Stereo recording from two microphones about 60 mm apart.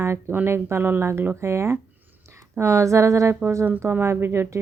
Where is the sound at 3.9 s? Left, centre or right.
Right.